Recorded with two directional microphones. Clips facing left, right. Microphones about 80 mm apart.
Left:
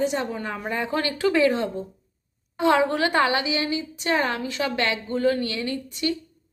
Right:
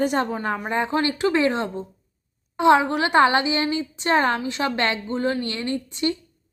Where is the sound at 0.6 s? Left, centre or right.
Right.